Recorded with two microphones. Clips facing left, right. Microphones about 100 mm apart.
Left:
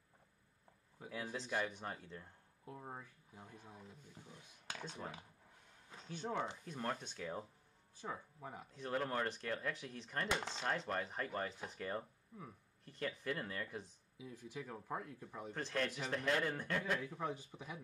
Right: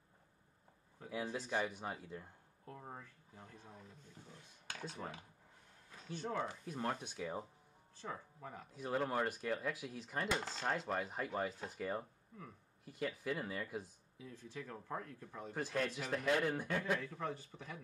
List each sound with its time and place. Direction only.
1.1 s speech: 15° right (ahead or behind)
2.6 s speech: 10° left (ahead or behind)
4.8 s speech: 5° right (ahead or behind)
6.3 s speech: 20° left (ahead or behind)
6.6 s speech: 5° right (ahead or behind)
8.0 s speech: 10° left (ahead or behind)
8.7 s speech: 10° right (ahead or behind)
14.1 s speech: 10° left (ahead or behind)
15.5 s speech: 10° right (ahead or behind)
17.0 s speech: 15° left (ahead or behind)